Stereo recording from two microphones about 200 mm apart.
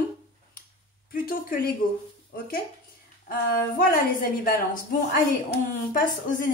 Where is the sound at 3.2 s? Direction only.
45° left (ahead or behind).